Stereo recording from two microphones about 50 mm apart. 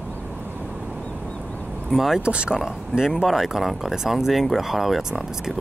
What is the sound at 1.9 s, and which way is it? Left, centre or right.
Speech, centre.